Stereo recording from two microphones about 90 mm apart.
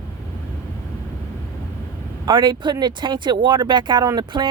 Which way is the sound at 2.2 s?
60° right (ahead or behind).